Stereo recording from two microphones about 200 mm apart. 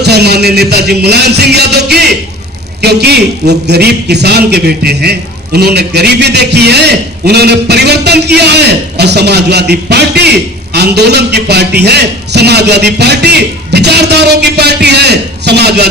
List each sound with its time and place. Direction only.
0.0 s a man's voice: 55° right (ahead or behind)